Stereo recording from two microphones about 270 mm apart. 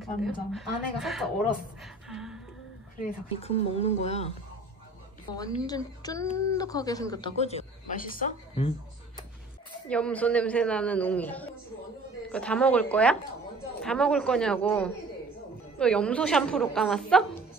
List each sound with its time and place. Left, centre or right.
0.0 s a man's voice: centre
3.0 s speech: left
5.7 s speech: centre
9.8 s a man's voice: centre